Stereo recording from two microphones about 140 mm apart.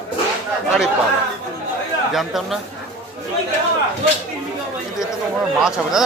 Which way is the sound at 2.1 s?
Centre (ahead or behind).